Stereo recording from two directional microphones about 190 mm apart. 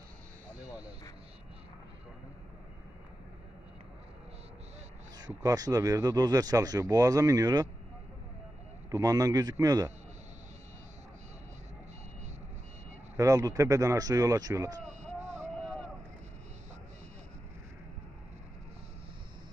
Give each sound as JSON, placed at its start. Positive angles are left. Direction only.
{"t": 5.3, "sound": "speech", "side_deg": -20}
{"t": 8.9, "sound": "speech", "side_deg": -20}
{"t": 13.1, "sound": "speech", "side_deg": -20}